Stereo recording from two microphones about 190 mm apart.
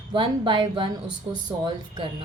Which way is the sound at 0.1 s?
25° right (ahead or behind).